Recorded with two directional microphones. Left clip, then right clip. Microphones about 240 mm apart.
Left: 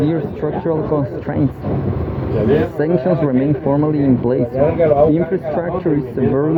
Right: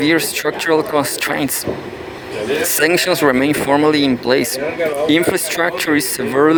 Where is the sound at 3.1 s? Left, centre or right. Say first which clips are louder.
Right 3 dB; right.